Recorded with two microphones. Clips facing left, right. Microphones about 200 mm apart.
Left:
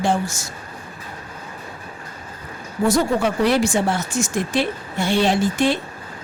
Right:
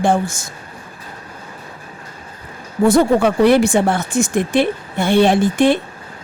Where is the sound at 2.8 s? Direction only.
55° right (ahead or behind).